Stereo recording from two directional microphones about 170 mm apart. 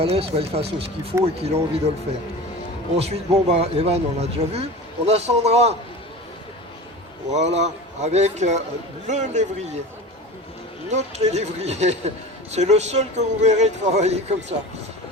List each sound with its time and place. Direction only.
0.0 s speech: 35° right (ahead or behind)
2.9 s speech: 40° right (ahead or behind)
7.3 s a man's voice: 40° right (ahead or behind)
10.9 s speech: 40° right (ahead or behind)